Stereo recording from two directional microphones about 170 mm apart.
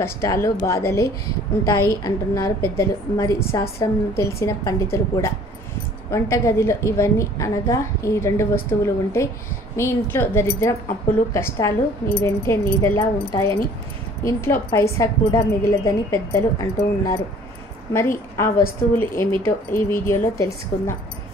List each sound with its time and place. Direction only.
0.0 s speech: 15° left (ahead or behind)
17.9 s speech: 15° left (ahead or behind)